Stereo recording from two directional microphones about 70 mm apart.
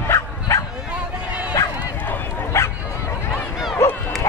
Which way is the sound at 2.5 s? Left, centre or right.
Left.